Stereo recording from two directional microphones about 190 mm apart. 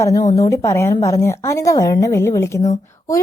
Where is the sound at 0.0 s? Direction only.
15° left (ahead or behind).